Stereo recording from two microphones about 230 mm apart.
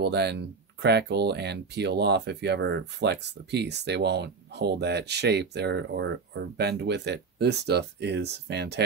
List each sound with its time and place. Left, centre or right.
0.0 s speech: right